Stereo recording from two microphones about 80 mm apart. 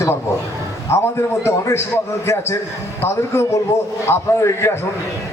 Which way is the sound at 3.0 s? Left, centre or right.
Left.